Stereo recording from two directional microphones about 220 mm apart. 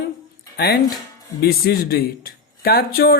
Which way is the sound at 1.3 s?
45° left (ahead or behind).